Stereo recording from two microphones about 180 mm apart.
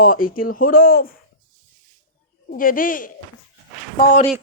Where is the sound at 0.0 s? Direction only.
50° left (ahead or behind).